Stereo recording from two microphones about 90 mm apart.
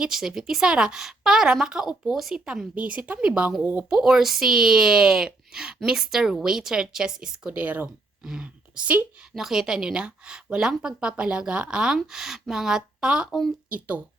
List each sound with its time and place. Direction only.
0.0 s a woman's voice: 5° right (ahead or behind); by 3.8 s 20° right (ahead or behind)
3.8 s a woman's voice: 5° right (ahead or behind)
9.3 s a woman's voice: 5° right (ahead or behind)